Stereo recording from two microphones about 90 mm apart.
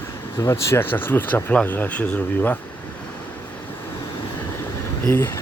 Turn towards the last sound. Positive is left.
turn(degrees=30)  # may be behind; listen again after turning